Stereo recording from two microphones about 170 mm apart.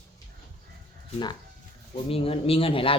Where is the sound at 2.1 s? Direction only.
35° left (ahead or behind).